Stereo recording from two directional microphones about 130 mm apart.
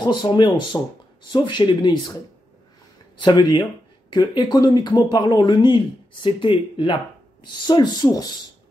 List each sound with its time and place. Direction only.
0.0 s speech: 35° left (ahead or behind)
3.2 s speech: 35° left (ahead or behind)